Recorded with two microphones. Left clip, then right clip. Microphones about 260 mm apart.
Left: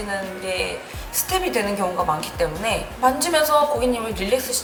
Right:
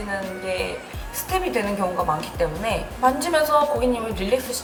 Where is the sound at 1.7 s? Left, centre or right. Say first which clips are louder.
Left 1 dB; centre.